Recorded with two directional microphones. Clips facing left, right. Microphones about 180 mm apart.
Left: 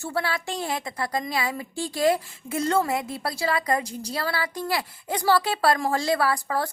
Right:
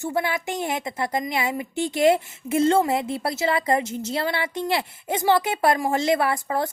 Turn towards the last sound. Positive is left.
turn(degrees=-20)  # may be behind; listen again after turning